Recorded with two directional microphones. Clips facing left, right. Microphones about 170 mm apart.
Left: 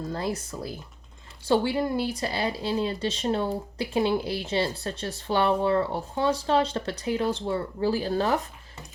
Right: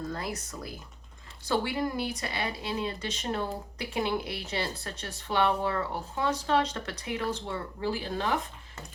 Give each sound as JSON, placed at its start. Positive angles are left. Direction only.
{"t": 0.1, "sound": "speech", "side_deg": 30}